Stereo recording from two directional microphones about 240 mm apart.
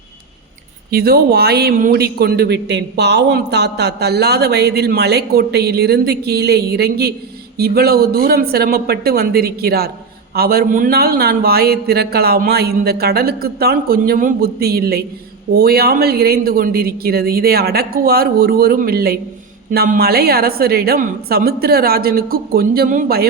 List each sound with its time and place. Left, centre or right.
0.9 s a man's voice: right